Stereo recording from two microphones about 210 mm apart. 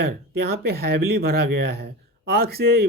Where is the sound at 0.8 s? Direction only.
50° right (ahead or behind).